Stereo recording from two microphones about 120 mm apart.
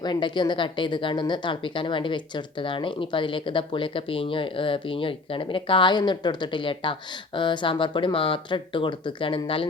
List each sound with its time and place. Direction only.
0.0 s a woman's voice: 40° left (ahead or behind)